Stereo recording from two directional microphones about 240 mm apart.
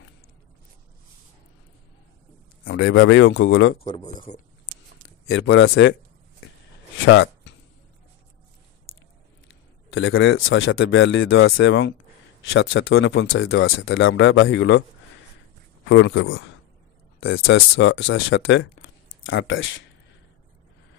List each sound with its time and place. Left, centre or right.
2.6 s speech: left
3.8 s speech: centre
5.3 s speech: left
7.1 s speech: left
9.5 s speech: left
15.9 s speech: left